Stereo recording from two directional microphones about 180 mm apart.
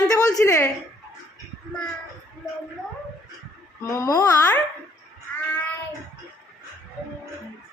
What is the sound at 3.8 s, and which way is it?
Speech, 15° left (ahead or behind).